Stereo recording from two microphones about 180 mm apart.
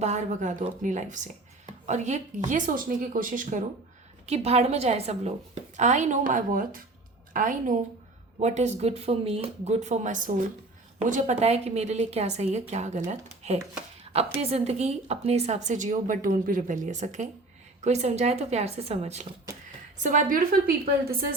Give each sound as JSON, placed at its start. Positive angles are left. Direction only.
{"t": 0.0, "sound": "speech", "side_deg": -40}
{"t": 4.3, "sound": "a woman's voice", "side_deg": -35}
{"t": 14.0, "sound": "a sound", "side_deg": -35}
{"t": 14.3, "sound": "a woman's voice", "side_deg": -35}